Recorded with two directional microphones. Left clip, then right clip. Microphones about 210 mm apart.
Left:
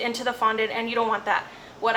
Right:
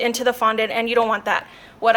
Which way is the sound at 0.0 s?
50° right (ahead or behind).